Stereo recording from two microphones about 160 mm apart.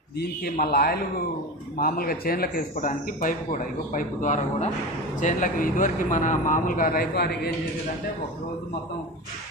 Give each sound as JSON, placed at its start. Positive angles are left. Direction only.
{"t": 0.2, "sound": "a man's voice", "side_deg": 75}